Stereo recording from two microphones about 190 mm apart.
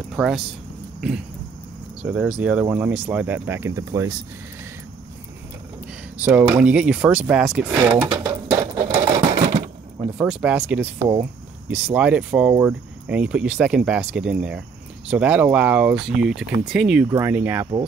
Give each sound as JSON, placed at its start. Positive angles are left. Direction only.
{"t": 0.1, "sound": "speech", "side_deg": -5}
{"t": 2.0, "sound": "speech", "side_deg": -5}
{"t": 6.2, "sound": "speech", "side_deg": -10}
{"t": 8.9, "sound": "sewing machine", "side_deg": -40}
{"t": 10.1, "sound": "speech", "side_deg": -5}